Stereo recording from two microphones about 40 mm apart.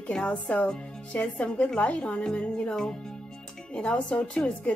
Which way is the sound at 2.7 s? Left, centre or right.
Centre.